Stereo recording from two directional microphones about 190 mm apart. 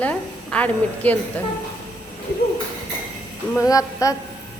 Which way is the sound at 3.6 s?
20° left (ahead or behind).